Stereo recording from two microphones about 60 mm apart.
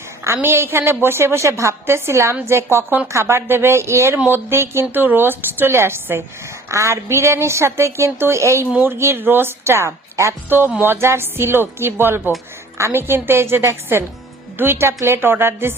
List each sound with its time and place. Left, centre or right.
0.4 s a woman's voice: right
6.7 s a woman's voice: right
9.2 s a woman's voice: right
10.8 s a woman's voice: right